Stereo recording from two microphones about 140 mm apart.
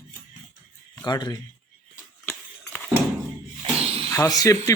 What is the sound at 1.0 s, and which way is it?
Speech, 30° left (ahead or behind).